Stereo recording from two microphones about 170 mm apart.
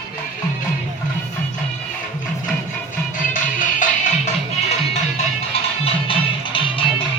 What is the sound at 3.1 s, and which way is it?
Music, 50° left (ahead or behind).